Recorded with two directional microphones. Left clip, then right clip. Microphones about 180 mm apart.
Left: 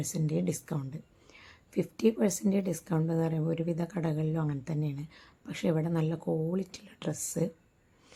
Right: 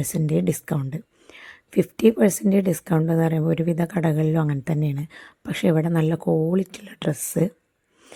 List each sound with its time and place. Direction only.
0.1 s speech: 40° right (ahead or behind)